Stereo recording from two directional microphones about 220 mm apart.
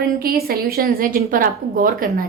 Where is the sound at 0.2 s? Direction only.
45° right (ahead or behind).